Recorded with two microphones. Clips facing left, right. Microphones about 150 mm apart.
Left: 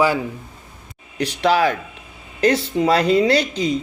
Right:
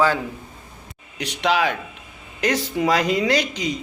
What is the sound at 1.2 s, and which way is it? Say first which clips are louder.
Speech: left 3 dB; 40° left (ahead or behind).